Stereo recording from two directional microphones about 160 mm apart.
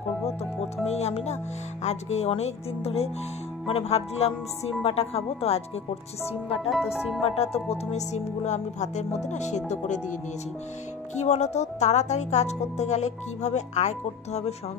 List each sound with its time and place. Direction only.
0.8 s speech: 40° left (ahead or behind)
6.7 s speech: 5° right (ahead or behind)
7.5 s speech: 40° left (ahead or behind)
11.1 s speech: 45° left (ahead or behind)